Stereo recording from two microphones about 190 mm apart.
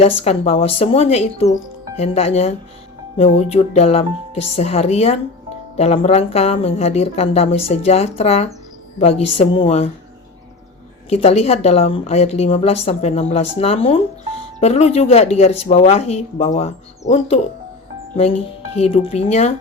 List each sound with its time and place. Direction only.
0.0 s speech: 35° left (ahead or behind)
11.1 s speech: 35° left (ahead or behind)